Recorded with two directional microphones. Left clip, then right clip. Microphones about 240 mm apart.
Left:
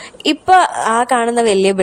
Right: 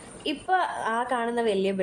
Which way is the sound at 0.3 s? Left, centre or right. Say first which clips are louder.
Left 14 dB; left.